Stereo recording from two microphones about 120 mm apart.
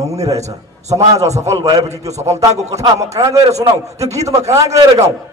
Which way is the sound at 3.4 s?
60° right (ahead or behind).